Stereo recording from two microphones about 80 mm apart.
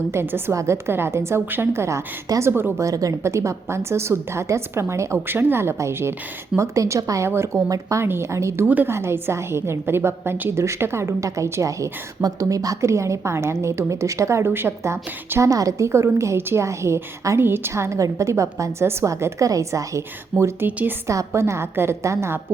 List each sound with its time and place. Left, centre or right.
0.1 s a woman's voice: right
2.8 s a woman's voice: right
8.6 s a woman's voice: right
20.3 s speech: centre
20.7 s a woman's voice: right
21.1 s a woman's voice: right